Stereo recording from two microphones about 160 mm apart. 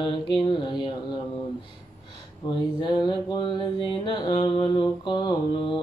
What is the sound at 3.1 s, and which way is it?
Mantra, 30° left (ahead or behind).